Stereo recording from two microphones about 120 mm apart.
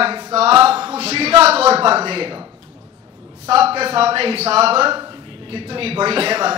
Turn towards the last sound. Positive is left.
turn(degrees=-55)  # may be behind; listen again after turning